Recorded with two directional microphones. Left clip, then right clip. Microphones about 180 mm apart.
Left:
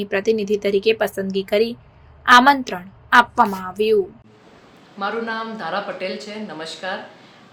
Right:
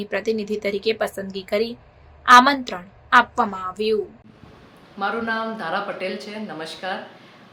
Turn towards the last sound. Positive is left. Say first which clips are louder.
# left 1 dB
turn(degrees=-5)  # may be behind; listen again after turning